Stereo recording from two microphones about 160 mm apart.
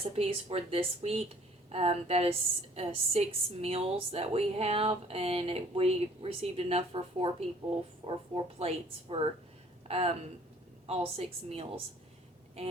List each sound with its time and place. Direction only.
0.2 s a woman's voice: 35° right (ahead or behind)